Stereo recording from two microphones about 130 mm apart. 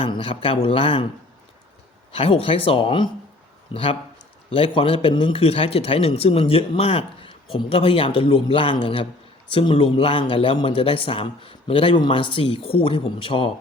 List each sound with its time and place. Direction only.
0.0 s speech: 40° left (ahead or behind)
2.1 s speech: 45° left (ahead or behind)